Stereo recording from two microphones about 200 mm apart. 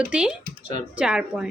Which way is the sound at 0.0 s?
5° right (ahead or behind).